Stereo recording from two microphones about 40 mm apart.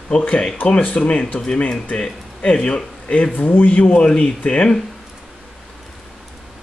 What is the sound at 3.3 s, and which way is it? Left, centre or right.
Speech, left.